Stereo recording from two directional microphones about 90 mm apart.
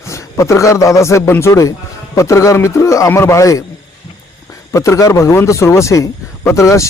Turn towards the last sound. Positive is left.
turn(degrees=35)  # may be behind; listen again after turning